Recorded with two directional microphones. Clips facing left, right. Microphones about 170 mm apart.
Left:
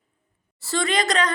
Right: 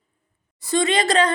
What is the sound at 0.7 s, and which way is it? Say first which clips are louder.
Speech: right 4 dB; 25° right (ahead or behind).